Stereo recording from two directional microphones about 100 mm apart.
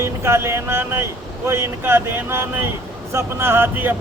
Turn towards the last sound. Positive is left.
turn(degrees=-20)  # may be behind; listen again after turning